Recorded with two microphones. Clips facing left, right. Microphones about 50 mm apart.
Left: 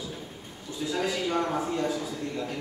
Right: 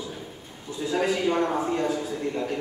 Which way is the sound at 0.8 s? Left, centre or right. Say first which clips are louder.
Right 5 dB; right.